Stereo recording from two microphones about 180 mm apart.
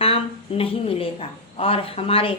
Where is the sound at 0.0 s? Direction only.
30° left (ahead or behind).